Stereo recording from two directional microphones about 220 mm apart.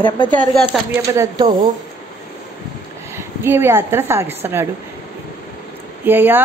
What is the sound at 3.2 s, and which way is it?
A woman's voice, 10° right (ahead or behind).